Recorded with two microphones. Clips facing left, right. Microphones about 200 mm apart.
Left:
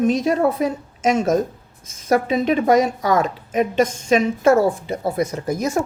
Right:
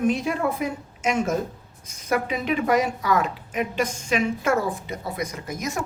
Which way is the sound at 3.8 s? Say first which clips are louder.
Left 6 dB; 25° left (ahead or behind).